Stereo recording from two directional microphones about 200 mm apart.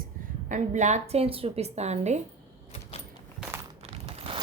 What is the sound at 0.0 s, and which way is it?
A woman's voice, 40° right (ahead or behind).